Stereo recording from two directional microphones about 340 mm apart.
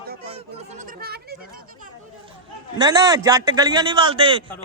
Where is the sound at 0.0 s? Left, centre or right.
Right.